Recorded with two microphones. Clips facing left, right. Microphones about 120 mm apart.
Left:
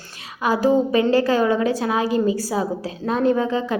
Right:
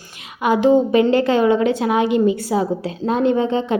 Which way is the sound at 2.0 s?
35° left (ahead or behind).